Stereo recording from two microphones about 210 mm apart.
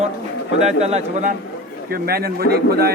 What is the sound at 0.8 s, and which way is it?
Speech, 30° right (ahead or behind).